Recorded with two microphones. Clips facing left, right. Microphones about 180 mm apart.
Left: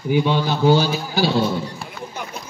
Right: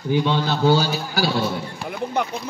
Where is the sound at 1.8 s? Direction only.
60° right (ahead or behind).